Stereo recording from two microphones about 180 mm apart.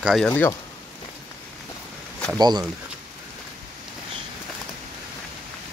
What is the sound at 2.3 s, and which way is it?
Speech, 20° right (ahead or behind).